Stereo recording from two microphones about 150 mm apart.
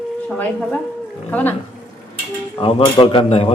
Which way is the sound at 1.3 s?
10° left (ahead or behind).